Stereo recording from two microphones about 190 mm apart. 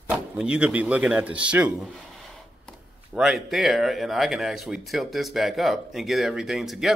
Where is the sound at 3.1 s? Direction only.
5° right (ahead or behind).